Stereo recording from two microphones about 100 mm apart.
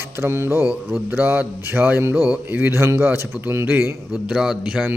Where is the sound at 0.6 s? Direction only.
5° right (ahead or behind).